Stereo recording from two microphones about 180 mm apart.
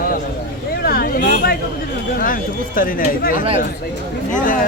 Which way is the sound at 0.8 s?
55° left (ahead or behind).